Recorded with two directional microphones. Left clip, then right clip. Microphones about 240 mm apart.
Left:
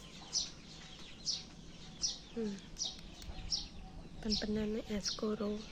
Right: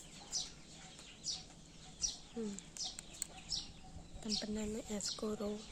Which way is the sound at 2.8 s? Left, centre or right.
Right.